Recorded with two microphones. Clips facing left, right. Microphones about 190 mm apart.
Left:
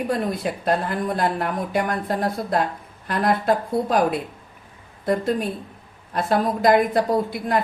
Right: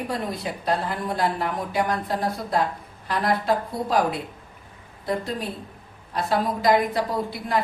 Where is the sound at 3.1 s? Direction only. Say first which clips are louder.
Left 3 dB; 55° left (ahead or behind).